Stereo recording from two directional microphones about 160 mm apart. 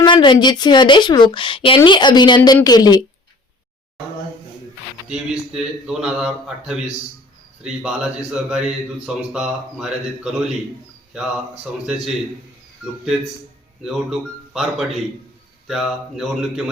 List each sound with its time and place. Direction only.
0.0 s a woman's voice: 30° left (ahead or behind)
5.0 s speech: 5° right (ahead or behind)
13.8 s speech: centre (ahead or behind)